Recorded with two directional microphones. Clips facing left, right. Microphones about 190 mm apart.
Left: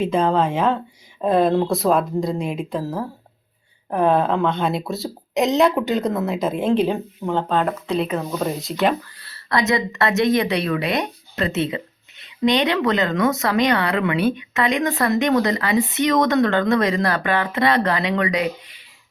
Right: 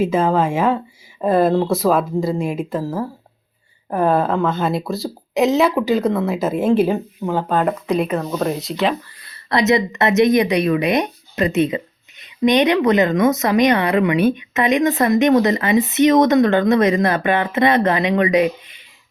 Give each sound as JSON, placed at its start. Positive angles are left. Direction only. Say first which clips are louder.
{"t": 0.0, "sound": "a woman's voice", "louder": "right 2 dB", "side_deg": -5}
{"t": 8.2, "sound": "speech", "louder": "right 3 dB", "side_deg": 0}
{"t": 9.2, "sound": "a woman's voice", "louder": "right 4 dB", "side_deg": -20}